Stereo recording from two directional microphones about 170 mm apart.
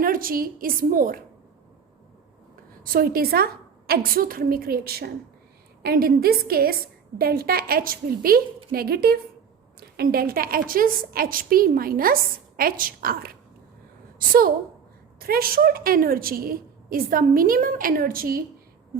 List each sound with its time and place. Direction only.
0.0 s a woman's voice: 55° right (ahead or behind)
2.8 s a woman's voice: 60° right (ahead or behind)